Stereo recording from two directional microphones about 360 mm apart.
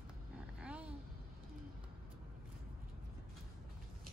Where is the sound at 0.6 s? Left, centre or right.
Centre.